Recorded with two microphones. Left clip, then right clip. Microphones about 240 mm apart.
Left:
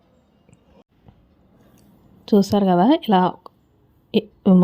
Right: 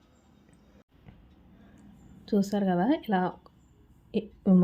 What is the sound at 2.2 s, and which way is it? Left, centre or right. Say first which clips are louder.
A woman's voice: left 11 dB; left.